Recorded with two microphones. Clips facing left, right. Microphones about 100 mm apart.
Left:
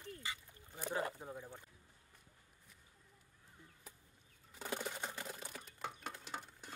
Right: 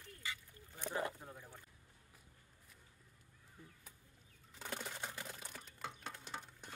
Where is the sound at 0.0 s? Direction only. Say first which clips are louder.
Left 2 dB; 20° left (ahead or behind).